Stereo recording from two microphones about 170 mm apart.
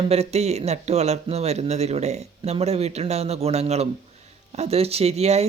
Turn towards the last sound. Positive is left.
turn(degrees=-40)  # may be behind; listen again after turning